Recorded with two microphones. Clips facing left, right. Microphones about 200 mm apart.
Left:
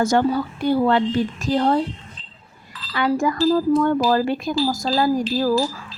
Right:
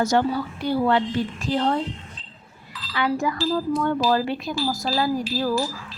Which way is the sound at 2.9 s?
45° left (ahead or behind).